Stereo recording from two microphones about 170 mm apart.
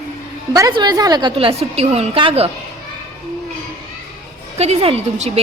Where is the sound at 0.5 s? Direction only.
20° right (ahead or behind).